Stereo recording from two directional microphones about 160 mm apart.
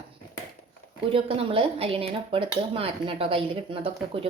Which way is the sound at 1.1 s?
35° right (ahead or behind).